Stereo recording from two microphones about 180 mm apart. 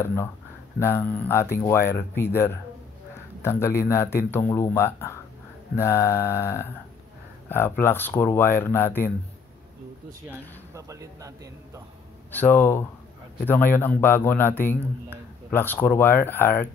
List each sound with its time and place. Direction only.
0.0 s a man's voice: 10° left (ahead or behind)
10.7 s speech: 20° right (ahead or behind)
12.3 s a man's voice: 10° left (ahead or behind)